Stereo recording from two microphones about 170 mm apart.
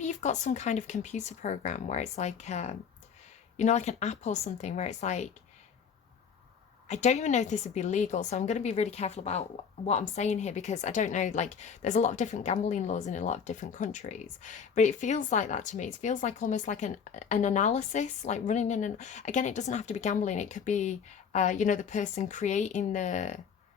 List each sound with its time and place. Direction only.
0.0 s a woman's voice: 45° left (ahead or behind)
6.8 s a woman's voice: 45° left (ahead or behind)